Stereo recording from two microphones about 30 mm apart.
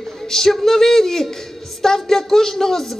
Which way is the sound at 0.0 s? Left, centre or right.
Centre.